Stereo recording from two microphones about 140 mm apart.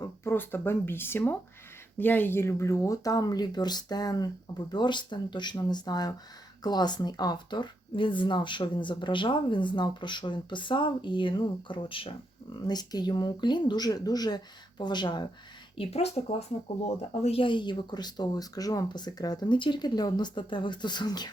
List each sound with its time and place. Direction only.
0.3 s speech: 15° left (ahead or behind); by 15.3 s 30° left (ahead or behind)
15.8 s speech: 50° left (ahead or behind); by 21.2 s 30° left (ahead or behind)